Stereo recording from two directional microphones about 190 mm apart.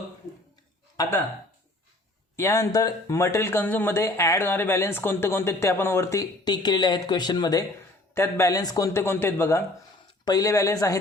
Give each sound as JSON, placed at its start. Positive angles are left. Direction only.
{"t": 1.0, "sound": "speech", "side_deg": 20}
{"t": 2.3, "sound": "speech", "side_deg": 15}